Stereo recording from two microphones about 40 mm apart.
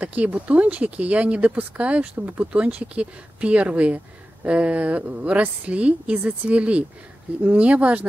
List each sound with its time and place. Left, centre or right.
0.0 s a woman's voice: right
2.5 s a woman's voice: right